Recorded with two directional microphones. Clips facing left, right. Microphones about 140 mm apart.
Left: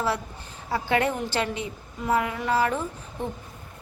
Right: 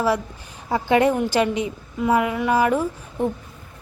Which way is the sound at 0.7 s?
15° right (ahead or behind).